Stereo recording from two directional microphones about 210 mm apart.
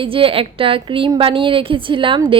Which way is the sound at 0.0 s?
25° right (ahead or behind).